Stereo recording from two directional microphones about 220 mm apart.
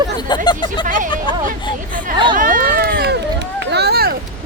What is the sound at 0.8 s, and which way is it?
Speech, 35° right (ahead or behind).